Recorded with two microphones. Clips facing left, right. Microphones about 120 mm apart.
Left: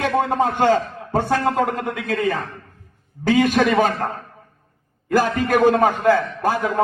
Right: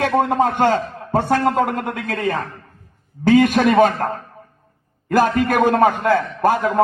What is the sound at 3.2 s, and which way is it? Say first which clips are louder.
Speech: right 3 dB; 55° right (ahead or behind).